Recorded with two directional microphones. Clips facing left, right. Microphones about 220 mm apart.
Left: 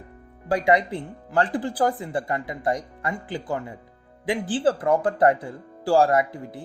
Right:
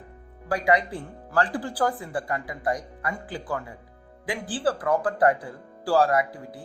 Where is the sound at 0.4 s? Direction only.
25° left (ahead or behind).